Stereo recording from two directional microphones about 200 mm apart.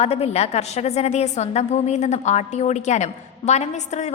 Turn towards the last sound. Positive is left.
turn(degrees=35)  # may be behind; listen again after turning